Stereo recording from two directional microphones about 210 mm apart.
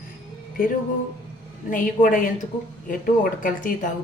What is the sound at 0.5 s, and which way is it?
A woman's voice, 40° left (ahead or behind).